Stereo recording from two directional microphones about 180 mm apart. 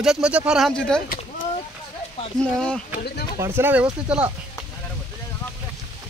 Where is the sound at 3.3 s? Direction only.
15° right (ahead or behind).